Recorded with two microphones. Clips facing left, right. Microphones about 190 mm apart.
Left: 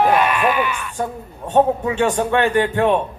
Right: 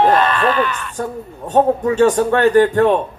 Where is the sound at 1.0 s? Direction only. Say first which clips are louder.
Right 1 dB; 40° right (ahead or behind).